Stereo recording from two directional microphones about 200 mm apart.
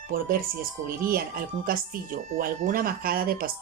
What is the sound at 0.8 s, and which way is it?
A woman's voice, 45° right (ahead or behind).